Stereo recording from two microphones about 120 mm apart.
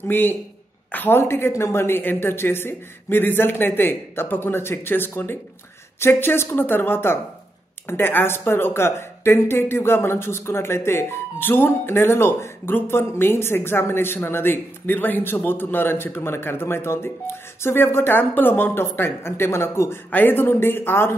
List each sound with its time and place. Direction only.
0.1 s speech: 15° left (ahead or behind)